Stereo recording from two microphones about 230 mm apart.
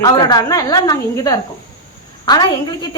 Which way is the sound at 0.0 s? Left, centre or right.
Centre.